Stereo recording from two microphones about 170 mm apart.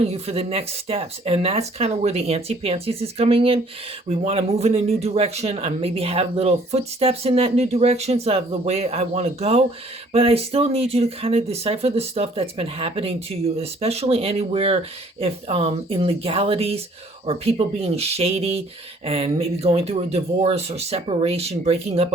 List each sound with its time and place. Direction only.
0.0 s speech: 35° right (ahead or behind)